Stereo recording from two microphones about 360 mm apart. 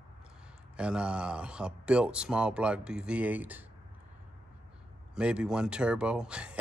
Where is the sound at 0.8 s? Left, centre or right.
Centre.